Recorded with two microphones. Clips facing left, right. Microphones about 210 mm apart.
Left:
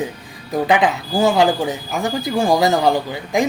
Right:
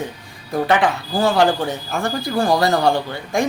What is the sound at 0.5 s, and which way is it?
A man's voice, 15° left (ahead or behind).